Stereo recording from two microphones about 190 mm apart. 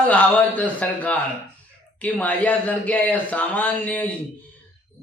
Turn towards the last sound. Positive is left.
turn(degrees=10)  # may be behind; listen again after turning